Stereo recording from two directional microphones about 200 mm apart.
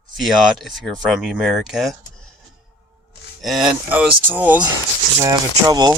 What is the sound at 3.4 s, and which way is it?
Speech, centre (ahead or behind).